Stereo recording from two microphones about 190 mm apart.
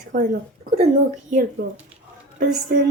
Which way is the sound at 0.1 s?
45° right (ahead or behind).